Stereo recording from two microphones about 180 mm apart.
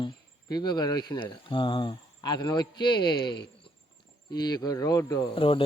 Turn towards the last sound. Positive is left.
turn(degrees=30)  # may be behind; listen again after turning